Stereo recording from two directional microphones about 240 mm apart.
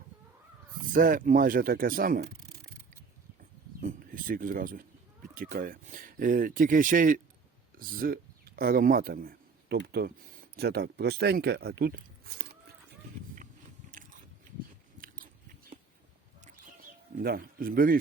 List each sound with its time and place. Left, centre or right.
0.8 s speech: right
3.8 s speech: right
13.9 s biting: right
17.2 s a man's voice: right